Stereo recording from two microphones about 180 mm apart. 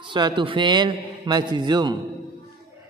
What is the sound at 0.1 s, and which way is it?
Speech, 25° right (ahead or behind).